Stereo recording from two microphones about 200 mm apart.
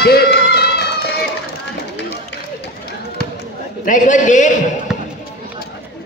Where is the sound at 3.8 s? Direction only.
40° left (ahead or behind).